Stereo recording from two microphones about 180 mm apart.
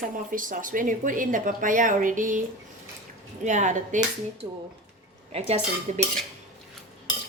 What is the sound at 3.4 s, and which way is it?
A woman's voice, 40° right (ahead or behind).